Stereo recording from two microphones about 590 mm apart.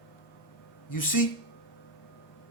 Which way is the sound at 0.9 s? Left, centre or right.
Left.